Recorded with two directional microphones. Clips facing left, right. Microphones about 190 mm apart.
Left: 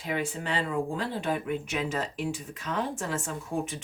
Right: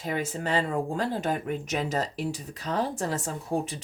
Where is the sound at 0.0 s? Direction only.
40° right (ahead or behind).